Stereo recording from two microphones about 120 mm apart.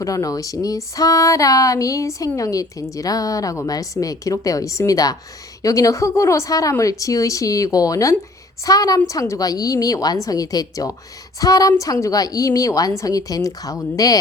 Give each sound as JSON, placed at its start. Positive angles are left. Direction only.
{"t": 0.0, "sound": "speech", "side_deg": 30}